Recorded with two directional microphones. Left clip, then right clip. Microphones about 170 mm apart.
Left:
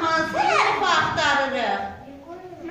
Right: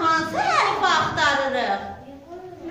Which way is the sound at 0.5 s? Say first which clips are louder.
Right 1 dB; 20° right (ahead or behind).